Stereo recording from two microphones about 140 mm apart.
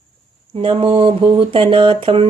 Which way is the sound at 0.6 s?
40° right (ahead or behind).